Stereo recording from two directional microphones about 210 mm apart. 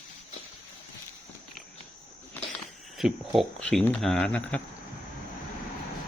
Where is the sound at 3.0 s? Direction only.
Centre (ahead or behind).